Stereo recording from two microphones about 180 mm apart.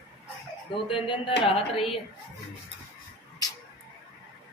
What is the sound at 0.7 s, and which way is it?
A woman's voice, 30° left (ahead or behind).